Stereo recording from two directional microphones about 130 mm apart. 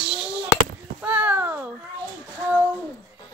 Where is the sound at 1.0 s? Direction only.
15° right (ahead or behind).